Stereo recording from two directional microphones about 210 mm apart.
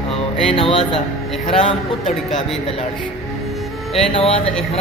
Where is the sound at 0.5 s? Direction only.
25° left (ahead or behind).